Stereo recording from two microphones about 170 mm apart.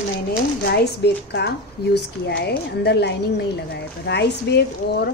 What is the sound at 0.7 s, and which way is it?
A woman's voice, 70° left (ahead or behind).